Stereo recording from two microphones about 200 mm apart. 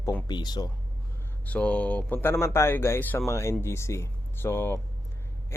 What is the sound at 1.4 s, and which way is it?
Speech, 5° left (ahead or behind).